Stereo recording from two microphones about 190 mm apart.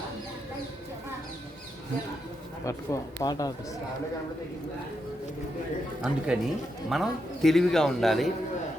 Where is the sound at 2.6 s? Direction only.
20° left (ahead or behind).